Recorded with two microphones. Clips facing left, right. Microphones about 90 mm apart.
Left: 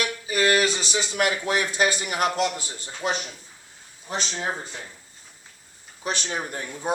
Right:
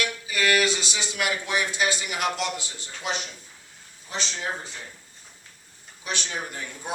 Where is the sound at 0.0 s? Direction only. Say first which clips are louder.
Left 3 dB; 35° left (ahead or behind).